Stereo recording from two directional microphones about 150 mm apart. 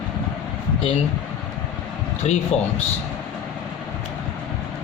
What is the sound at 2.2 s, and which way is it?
Speech, 50° left (ahead or behind).